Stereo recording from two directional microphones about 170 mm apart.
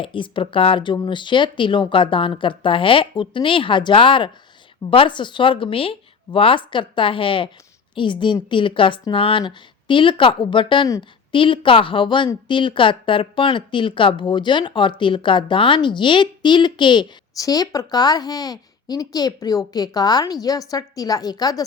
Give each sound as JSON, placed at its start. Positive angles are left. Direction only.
{"t": 0.0, "sound": "speech", "side_deg": 30}